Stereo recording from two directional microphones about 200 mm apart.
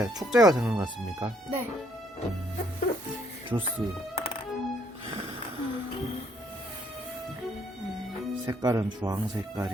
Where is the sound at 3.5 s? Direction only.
15° right (ahead or behind).